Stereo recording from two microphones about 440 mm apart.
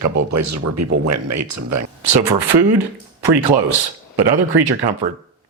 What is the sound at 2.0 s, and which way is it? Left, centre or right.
Speech, right.